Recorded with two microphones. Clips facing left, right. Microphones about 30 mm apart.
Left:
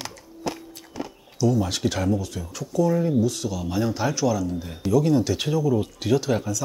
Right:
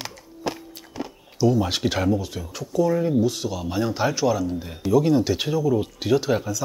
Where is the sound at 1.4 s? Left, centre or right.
Right.